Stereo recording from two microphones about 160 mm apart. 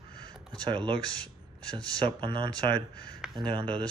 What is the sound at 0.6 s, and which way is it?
Speech, 30° right (ahead or behind).